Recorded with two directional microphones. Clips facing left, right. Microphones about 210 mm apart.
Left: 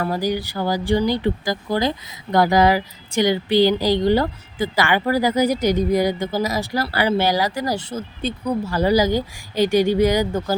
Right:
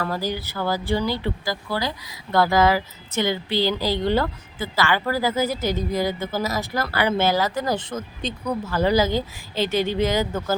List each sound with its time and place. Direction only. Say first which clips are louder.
0.0 s speech: left 4 dB; 15° left (ahead or behind)
6.8 s speech: left 2 dB; 35° left (ahead or behind)
7.2 s speech: left 1 dB; 15° left (ahead or behind)